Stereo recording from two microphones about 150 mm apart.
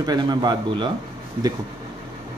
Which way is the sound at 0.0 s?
25° right (ahead or behind).